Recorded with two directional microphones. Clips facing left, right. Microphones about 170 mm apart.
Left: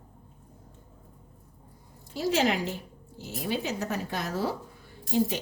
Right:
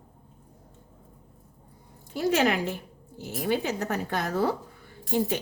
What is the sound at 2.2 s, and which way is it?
A woman's voice, 60° right (ahead or behind).